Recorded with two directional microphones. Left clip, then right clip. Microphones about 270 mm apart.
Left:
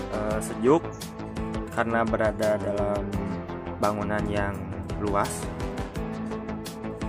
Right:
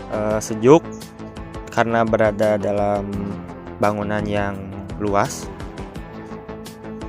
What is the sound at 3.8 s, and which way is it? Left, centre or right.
Speech, centre.